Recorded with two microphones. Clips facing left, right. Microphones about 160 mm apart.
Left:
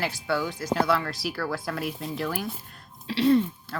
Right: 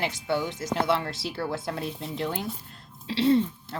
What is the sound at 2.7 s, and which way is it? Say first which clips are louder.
Throat clearing: even; 25° right (ahead or behind).